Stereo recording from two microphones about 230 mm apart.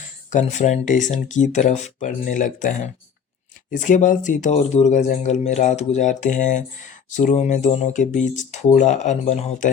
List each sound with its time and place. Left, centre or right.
0.3 s speech: left